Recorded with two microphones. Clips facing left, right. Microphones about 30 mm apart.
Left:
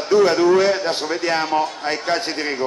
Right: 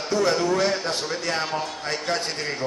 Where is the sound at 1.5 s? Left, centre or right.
Left.